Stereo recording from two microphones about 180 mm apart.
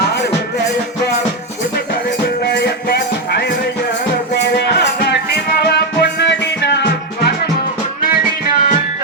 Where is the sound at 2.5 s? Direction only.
65° left (ahead or behind).